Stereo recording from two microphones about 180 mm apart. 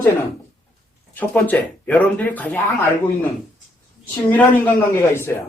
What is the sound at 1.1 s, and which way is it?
Speech, 10° left (ahead or behind).